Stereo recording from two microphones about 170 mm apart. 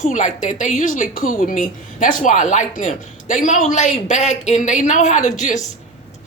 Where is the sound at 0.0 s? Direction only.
45° left (ahead or behind).